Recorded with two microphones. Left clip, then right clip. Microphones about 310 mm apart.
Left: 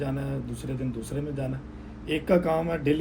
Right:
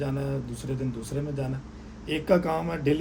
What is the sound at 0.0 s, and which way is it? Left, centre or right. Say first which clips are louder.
Speech: right 1 dB; centre.